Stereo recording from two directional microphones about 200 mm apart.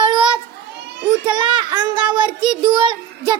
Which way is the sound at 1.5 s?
20° right (ahead or behind).